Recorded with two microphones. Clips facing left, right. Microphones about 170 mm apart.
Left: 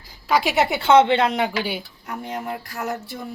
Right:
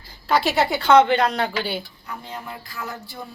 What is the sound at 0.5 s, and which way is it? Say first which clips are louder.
A woman's voice: even; 20° left (ahead or behind).